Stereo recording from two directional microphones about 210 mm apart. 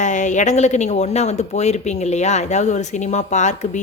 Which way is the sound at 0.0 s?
35° left (ahead or behind).